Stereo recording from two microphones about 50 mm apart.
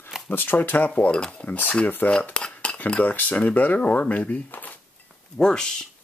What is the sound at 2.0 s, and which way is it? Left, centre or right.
Cutlery, left.